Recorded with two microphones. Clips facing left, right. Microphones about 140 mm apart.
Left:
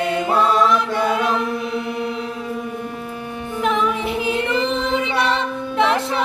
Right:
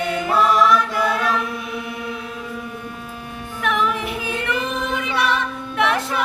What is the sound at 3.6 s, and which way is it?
Music, 25° left (ahead or behind).